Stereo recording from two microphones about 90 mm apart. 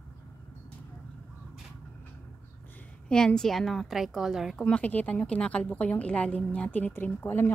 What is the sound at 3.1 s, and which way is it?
A woman's voice, 10° left (ahead or behind).